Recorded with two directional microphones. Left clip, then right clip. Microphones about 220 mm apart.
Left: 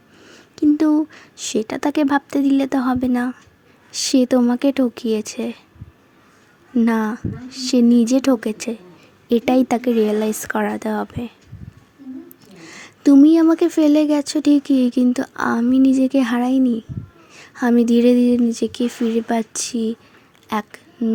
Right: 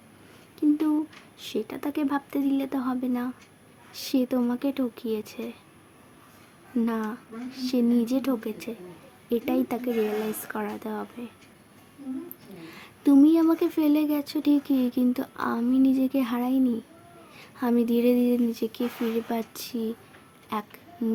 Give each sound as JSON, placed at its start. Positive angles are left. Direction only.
{"t": 0.3, "sound": "a woman's voice", "side_deg": 35}
{"t": 6.7, "sound": "a woman's voice", "side_deg": 35}
{"t": 12.5, "sound": "a woman's voice", "side_deg": 30}
{"t": 20.5, "sound": "a sound", "side_deg": 30}